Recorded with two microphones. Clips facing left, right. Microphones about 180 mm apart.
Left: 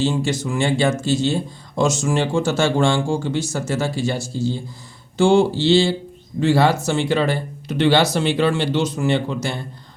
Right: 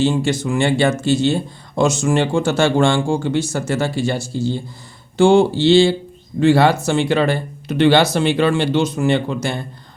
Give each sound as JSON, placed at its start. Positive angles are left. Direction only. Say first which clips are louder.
{"t": 0.0, "sound": "speech", "louder": "right 3 dB", "side_deg": -60}